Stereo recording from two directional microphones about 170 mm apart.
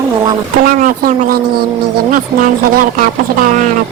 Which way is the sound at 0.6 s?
55° right (ahead or behind).